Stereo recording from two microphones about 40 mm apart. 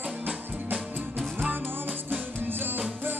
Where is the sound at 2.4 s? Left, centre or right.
Right.